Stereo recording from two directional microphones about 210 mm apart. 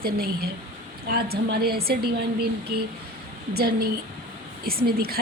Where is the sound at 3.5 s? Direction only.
45° right (ahead or behind).